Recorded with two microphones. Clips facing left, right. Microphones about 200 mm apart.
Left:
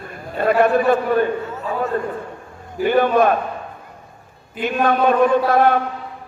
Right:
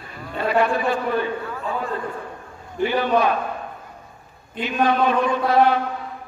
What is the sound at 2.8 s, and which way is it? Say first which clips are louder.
Speech: left 4 dB; 50° left (ahead or behind).